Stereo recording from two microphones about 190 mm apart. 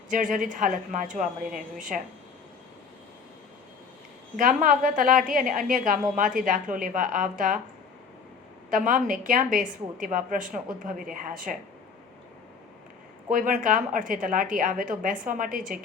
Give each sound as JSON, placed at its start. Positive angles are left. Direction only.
{"t": 0.1, "sound": "a woman's voice", "side_deg": -40}
{"t": 4.4, "sound": "a woman's voice", "side_deg": -45}
{"t": 8.7, "sound": "a woman's voice", "side_deg": -45}
{"t": 13.3, "sound": "a woman's voice", "side_deg": -45}